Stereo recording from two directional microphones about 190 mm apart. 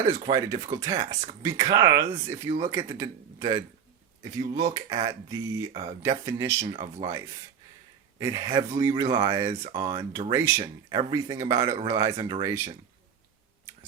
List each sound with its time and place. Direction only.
0.3 s speech: 20° right (ahead or behind)
8.2 s speech: 20° right (ahead or behind)